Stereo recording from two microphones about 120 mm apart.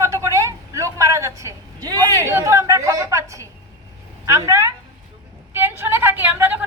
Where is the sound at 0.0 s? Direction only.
25° right (ahead or behind).